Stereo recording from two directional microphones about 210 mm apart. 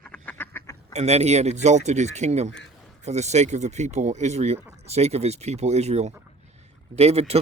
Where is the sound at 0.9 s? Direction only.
30° right (ahead or behind).